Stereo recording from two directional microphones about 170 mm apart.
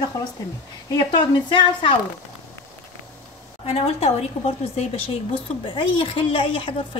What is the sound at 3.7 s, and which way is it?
Speech, 40° left (ahead or behind).